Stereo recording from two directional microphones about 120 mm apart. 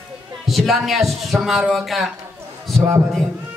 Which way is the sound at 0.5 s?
Centre (ahead or behind).